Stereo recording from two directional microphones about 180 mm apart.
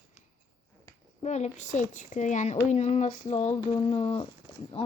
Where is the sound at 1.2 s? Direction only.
40° left (ahead or behind).